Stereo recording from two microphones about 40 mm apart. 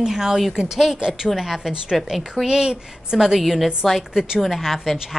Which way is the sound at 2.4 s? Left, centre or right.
Centre.